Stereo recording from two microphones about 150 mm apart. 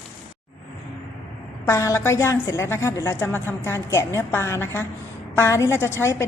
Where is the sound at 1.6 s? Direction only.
20° left (ahead or behind).